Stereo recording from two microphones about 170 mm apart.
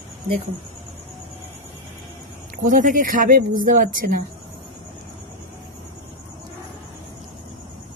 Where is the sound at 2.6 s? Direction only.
50° right (ahead or behind).